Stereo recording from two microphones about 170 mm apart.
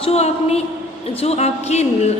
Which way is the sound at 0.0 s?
40° left (ahead or behind).